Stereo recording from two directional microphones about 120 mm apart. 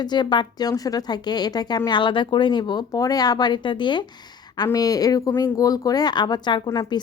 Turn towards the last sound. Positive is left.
turn(degrees=35)  # may be behind; listen again after turning